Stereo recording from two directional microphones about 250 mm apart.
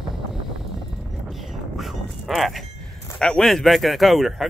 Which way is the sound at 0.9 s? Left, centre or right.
Centre.